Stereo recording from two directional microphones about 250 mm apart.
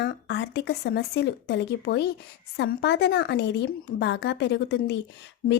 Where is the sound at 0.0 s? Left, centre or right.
Left.